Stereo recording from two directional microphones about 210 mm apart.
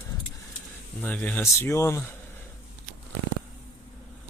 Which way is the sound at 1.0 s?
5° left (ahead or behind).